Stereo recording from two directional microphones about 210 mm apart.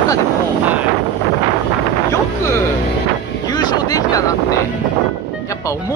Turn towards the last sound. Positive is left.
turn(degrees=15)  # may be behind; listen again after turning